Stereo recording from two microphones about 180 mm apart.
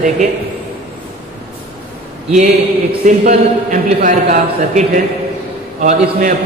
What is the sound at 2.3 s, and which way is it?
A man's voice, 40° right (ahead or behind).